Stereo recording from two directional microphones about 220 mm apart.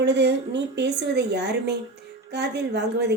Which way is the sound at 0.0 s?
50° right (ahead or behind).